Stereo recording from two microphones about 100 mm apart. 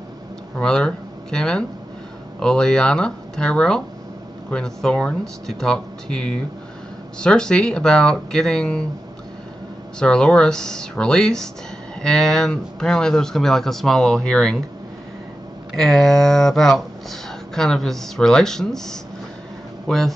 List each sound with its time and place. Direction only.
0.6 s speech: 10° left (ahead or behind)
9.9 s speech: 10° left (ahead or behind)
15.7 s speech: 5° left (ahead or behind)